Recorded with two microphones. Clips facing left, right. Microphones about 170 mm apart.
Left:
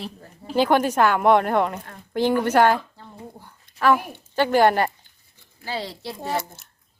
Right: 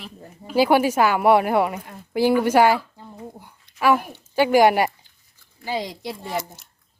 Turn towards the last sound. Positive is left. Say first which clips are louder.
# right 3 dB
turn(degrees=-15)  # may be behind; listen again after turning